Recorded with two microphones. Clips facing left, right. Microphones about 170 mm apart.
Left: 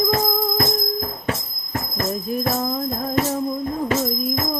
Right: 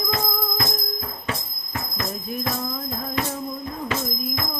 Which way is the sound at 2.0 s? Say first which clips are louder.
Left 7 dB; 45° left (ahead or behind).